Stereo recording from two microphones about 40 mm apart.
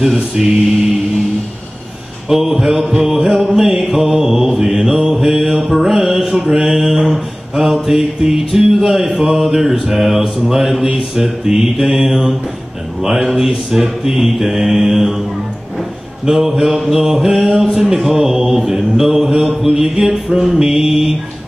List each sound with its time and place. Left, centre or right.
0.4 s music: centre
2.2 s music: centre
4.6 s mantra: centre
6.5 s music: centre
11.4 s mantra: centre
13.0 s music: centre
13.7 s mantra: centre
16.3 s music: centre